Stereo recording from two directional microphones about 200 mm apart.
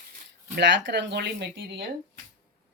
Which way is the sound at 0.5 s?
65° right (ahead or behind).